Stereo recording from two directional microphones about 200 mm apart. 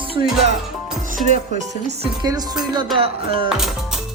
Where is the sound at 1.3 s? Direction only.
35° right (ahead or behind).